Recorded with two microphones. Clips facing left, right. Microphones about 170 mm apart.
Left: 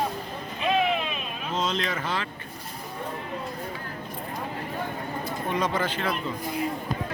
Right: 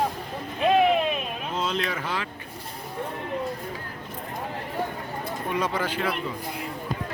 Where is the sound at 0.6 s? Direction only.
45° right (ahead or behind).